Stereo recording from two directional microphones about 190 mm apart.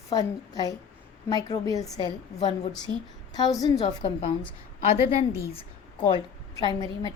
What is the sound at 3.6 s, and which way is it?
Speech, 25° left (ahead or behind).